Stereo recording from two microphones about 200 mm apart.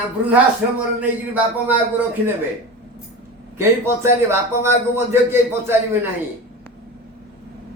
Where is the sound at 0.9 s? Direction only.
10° right (ahead or behind).